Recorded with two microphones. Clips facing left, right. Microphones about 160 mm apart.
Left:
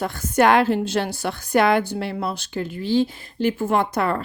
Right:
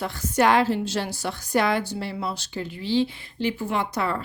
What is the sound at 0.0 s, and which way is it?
A woman's voice, 50° left (ahead or behind).